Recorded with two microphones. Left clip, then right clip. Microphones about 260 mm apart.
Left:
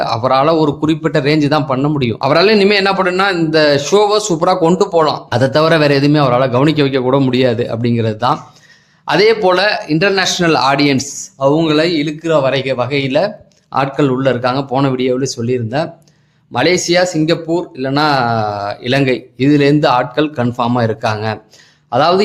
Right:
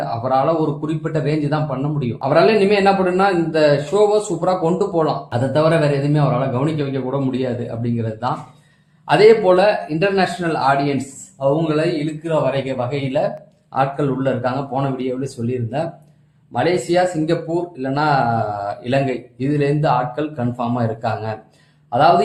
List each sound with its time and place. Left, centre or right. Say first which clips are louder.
0.0 s a man's voice: left 6 dB; left